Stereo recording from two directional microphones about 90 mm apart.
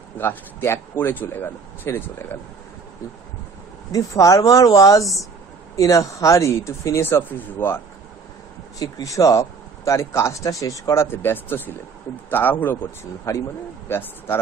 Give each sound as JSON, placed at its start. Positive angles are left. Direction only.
{"t": 0.2, "sound": "speech", "side_deg": 25}
{"t": 3.9, "sound": "speech", "side_deg": 40}
{"t": 8.7, "sound": "speech", "side_deg": 45}
{"t": 11.1, "sound": "speech", "side_deg": 25}
{"t": 13.3, "sound": "speech", "side_deg": 35}